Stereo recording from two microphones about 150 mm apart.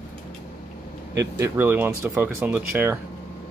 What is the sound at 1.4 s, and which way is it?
Speech, 15° right (ahead or behind).